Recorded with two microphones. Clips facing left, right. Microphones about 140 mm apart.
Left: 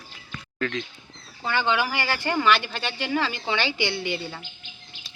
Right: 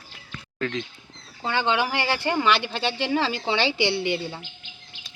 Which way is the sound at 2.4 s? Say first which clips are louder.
Even; 25° right (ahead or behind).